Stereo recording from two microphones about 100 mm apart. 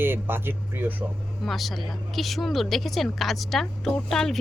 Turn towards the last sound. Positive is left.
turn(degrees=5)  # may be behind; listen again after turning